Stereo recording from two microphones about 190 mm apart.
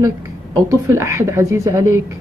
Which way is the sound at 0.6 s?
15° right (ahead or behind).